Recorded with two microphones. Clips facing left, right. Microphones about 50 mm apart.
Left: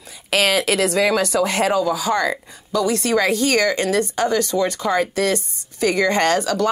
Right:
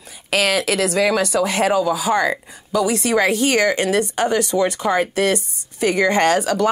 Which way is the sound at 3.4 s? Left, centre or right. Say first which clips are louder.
Right 1 dB; right.